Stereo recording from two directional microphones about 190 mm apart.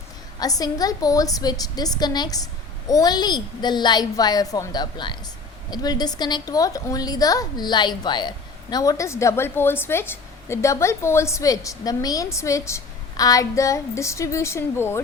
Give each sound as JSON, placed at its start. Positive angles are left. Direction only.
{"t": 0.3, "sound": "a woman's voice", "side_deg": 20}